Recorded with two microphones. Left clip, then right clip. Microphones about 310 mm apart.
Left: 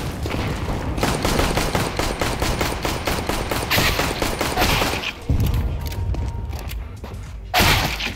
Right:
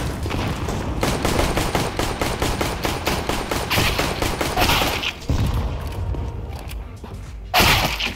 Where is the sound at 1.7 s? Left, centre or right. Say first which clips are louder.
Even; centre.